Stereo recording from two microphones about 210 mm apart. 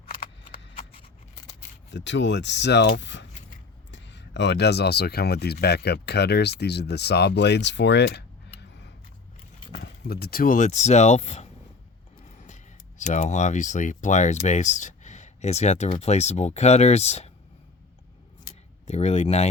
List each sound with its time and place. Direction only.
0.1 s a sound: 45° left (ahead or behind)
0.7 s scissors: 25° left (ahead or behind)
1.9 s speech: 60° left (ahead or behind)
9.7 s speech: 50° left (ahead or behind); by 17.3 s 30° left (ahead or behind)
18.9 s speech: 30° left (ahead or behind)